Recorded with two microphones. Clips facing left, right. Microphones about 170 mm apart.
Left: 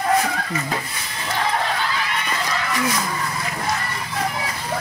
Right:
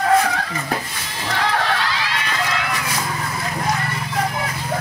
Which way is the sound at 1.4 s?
80° right.